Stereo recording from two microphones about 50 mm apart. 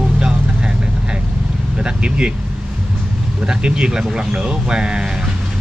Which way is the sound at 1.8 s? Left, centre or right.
Right.